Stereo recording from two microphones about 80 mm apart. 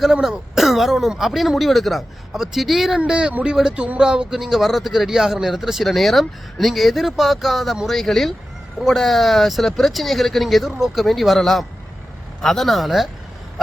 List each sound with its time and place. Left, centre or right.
0.0 s speech: centre